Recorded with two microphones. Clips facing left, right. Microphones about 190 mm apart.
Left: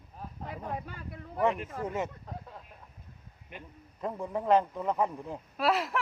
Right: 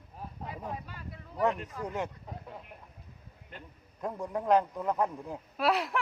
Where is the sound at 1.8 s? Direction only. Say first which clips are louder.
Left 1 dB; centre (ahead or behind).